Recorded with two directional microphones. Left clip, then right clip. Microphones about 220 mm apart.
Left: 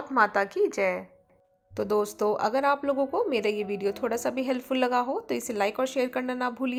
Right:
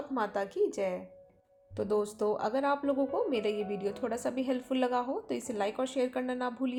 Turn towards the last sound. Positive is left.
turn(degrees=15)  # may be behind; listen again after turning